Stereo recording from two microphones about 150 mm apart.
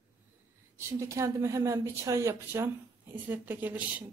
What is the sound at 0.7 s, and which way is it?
Speech, 20° right (ahead or behind).